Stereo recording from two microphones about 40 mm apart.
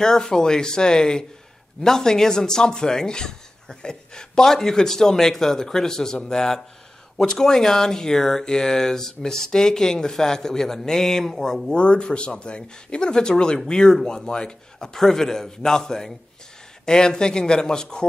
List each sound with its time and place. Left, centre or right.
0.0 s speech: centre
11.6 s speech: left